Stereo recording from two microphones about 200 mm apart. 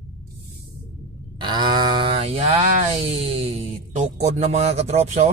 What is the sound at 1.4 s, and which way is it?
A man's voice, 20° right (ahead or behind).